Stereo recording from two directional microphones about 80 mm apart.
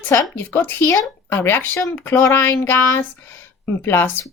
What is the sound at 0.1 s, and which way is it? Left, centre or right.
Speech, left.